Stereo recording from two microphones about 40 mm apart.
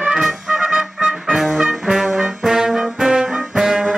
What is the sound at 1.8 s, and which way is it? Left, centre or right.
Brass instrument, centre.